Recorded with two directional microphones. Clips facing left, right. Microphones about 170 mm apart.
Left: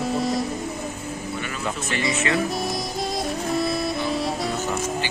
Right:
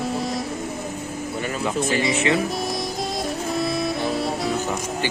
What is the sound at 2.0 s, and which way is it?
Speech, 25° right (ahead or behind).